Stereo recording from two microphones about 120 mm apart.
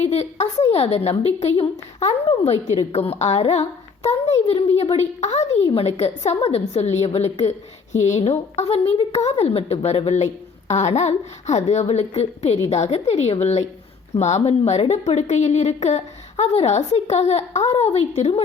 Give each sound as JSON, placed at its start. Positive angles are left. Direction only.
{"t": 0.0, "sound": "a woman's voice", "side_deg": 65}
{"t": 7.9, "sound": "a woman's voice", "side_deg": 75}
{"t": 8.5, "sound": "a woman's voice", "side_deg": 60}